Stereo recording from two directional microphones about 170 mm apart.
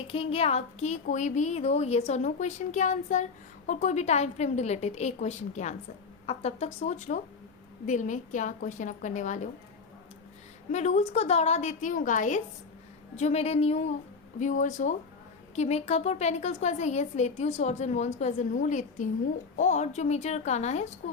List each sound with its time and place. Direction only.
0.1 s a woman's voice: 35° left (ahead or behind)
10.7 s a woman's voice: 45° left (ahead or behind)